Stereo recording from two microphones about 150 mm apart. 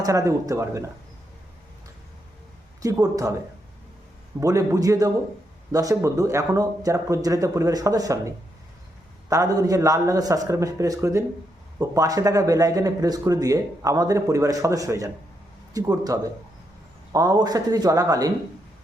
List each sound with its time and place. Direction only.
0.0 s speech: 20° right (ahead or behind)
2.8 s speech: 20° right (ahead or behind)
4.4 s speech: 20° right (ahead or behind)
9.3 s speech: 20° right (ahead or behind)